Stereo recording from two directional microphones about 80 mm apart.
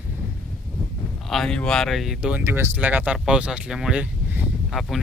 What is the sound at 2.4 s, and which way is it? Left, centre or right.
Speech, right.